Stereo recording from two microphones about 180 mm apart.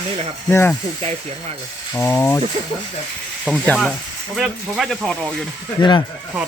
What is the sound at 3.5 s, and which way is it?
Speech, 5° left (ahead or behind).